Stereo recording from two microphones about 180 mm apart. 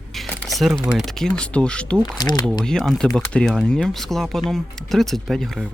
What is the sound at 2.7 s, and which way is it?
Speech, centre (ahead or behind).